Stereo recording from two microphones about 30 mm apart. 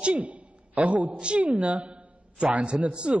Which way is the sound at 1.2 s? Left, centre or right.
Right.